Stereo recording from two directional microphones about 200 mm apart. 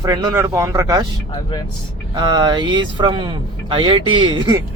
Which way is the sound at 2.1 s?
20° right (ahead or behind).